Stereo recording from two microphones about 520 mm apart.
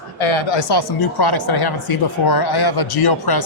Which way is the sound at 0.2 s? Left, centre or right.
Left.